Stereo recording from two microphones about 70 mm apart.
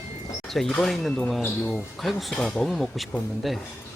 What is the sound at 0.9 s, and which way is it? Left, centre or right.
Speech, centre.